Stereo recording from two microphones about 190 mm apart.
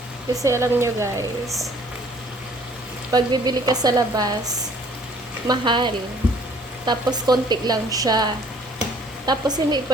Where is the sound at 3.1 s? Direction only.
20° right (ahead or behind).